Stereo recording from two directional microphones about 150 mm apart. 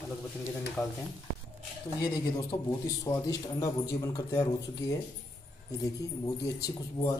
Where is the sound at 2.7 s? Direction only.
25° left (ahead or behind).